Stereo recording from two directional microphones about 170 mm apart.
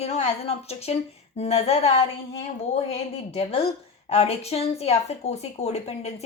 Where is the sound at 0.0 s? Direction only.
40° left (ahead or behind).